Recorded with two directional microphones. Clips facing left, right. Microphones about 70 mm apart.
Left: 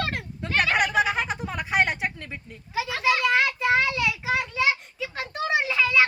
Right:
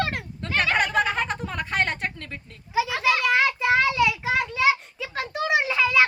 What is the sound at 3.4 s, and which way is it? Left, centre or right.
Child singing, centre.